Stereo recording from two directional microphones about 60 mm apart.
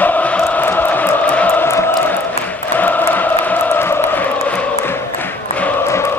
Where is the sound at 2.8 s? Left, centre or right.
Left.